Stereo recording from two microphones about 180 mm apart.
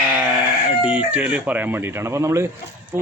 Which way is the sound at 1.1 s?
5° right (ahead or behind).